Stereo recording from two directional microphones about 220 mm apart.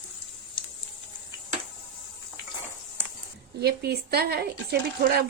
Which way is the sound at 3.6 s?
45° right (ahead or behind).